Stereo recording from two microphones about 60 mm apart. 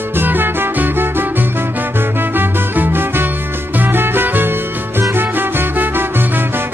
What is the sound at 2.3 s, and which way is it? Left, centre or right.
Music, right.